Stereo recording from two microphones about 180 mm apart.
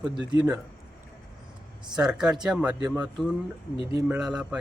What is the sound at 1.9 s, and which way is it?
Speech, 5° right (ahead or behind).